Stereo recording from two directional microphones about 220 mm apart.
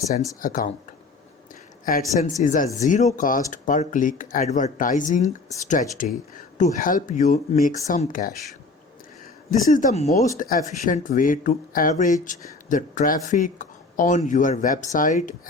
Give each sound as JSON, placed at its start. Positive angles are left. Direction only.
{"t": 0.4, "sound": "speech", "side_deg": 40}
{"t": 1.8, "sound": "speech", "side_deg": 40}
{"t": 9.7, "sound": "speech", "side_deg": 35}